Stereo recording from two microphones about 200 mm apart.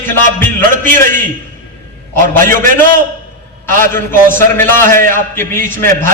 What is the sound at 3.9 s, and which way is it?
A man's voice, 10° left (ahead or behind).